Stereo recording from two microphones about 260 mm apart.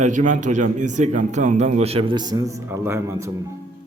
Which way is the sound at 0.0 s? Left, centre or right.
Right.